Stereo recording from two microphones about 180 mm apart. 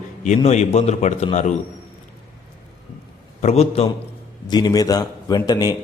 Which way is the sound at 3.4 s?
35° left (ahead or behind).